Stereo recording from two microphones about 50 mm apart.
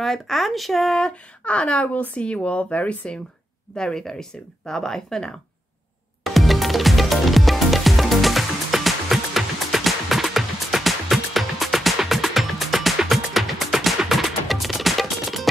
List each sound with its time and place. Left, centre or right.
0.0 s speech: centre
1.4 s speech: left
3.7 s speech: centre
6.2 s music: centre